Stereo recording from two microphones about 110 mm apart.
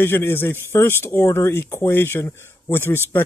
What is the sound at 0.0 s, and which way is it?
Speech, 20° left (ahead or behind).